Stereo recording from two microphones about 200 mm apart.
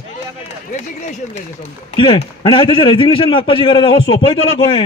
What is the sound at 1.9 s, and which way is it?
A man's voice, 25° left (ahead or behind).